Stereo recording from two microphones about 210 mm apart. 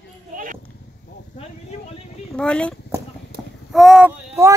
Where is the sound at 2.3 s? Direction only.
5° left (ahead or behind).